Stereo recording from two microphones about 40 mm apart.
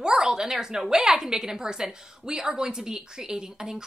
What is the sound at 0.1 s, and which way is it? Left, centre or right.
A woman's voice, centre.